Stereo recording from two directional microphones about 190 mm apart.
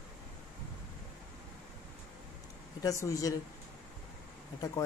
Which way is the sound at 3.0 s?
15° left (ahead or behind).